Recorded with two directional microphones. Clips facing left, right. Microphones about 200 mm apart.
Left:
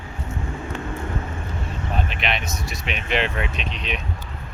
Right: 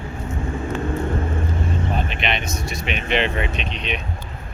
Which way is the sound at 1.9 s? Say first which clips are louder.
Right 2 dB; centre (ahead or behind).